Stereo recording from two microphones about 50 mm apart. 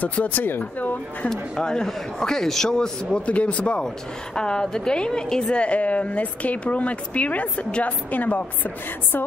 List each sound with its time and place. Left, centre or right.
0.0 s speech: left
1.3 s a man's voice: centre; by 9.2 s left